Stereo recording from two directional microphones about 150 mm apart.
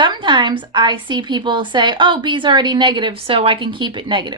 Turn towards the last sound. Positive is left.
turn(degrees=-30)  # may be behind; listen again after turning